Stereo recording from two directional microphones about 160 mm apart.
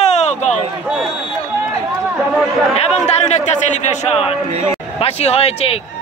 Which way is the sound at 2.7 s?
45° left (ahead or behind).